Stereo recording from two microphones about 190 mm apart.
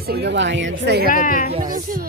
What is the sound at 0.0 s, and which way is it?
Speech, 60° right (ahead or behind).